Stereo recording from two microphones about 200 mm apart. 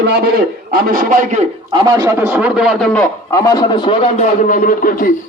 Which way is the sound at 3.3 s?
15° left (ahead or behind).